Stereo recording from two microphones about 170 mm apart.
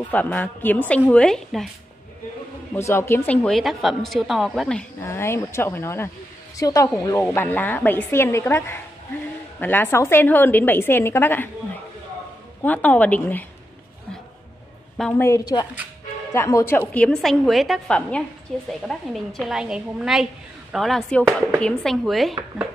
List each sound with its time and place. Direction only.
0.1 s a woman's voice: 10° left (ahead or behind)
2.7 s a woman's voice: 15° left (ahead or behind)
3.4 s a woman's voice: centre (ahead or behind)
12.6 s a woman's voice: 10° left (ahead or behind)
15.0 s a woman's voice: 5° left (ahead or behind)
15.2 s a woman's voice: 20° left (ahead or behind); by 22.3 s centre (ahead or behind)